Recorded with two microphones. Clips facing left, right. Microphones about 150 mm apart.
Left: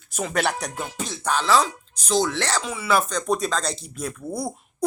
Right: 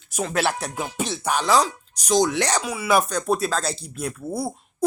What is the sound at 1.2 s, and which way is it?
Speech, 15° right (ahead or behind).